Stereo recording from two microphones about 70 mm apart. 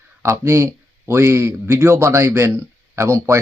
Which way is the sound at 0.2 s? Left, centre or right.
Right.